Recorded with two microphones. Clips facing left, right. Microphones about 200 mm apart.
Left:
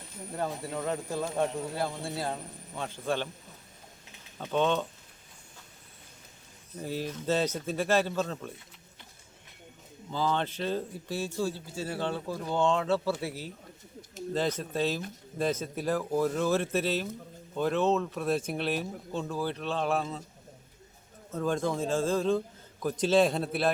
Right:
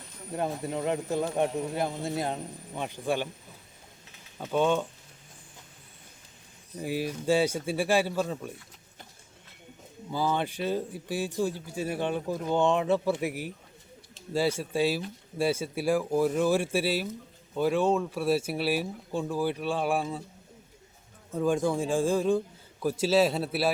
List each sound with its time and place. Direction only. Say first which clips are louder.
0.3 s a man's voice: right 3 dB; 20° right (ahead or behind)
4.4 s a man's voice: right 2 dB; 10° right (ahead or behind)
6.7 s a man's voice: right 3 dB; 10° right (ahead or behind)
10.1 s a man's voice: right 1 dB; 10° right (ahead or behind)
21.3 s a man's voice: right 3 dB; 10° right (ahead or behind)